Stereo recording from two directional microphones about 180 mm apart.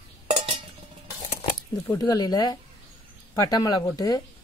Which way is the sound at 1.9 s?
20° left (ahead or behind).